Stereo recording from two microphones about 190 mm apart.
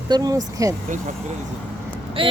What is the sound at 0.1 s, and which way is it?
Speech, 20° right (ahead or behind).